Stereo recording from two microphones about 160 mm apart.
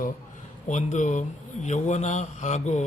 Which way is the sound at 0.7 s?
50° left (ahead or behind).